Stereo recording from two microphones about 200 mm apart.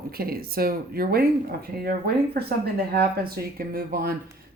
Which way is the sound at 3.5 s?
45° right (ahead or behind).